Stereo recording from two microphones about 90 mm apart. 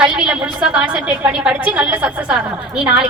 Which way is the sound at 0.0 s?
10° right (ahead or behind).